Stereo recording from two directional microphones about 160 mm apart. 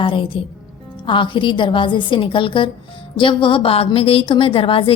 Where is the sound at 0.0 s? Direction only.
30° left (ahead or behind).